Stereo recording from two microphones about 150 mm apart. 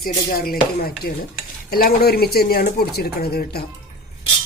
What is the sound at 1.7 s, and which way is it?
Speech, 90° left.